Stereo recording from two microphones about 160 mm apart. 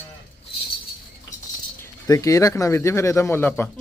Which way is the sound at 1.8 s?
20° left (ahead or behind).